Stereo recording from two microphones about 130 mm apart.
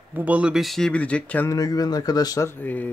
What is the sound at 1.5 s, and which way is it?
Speech, 30° left (ahead or behind).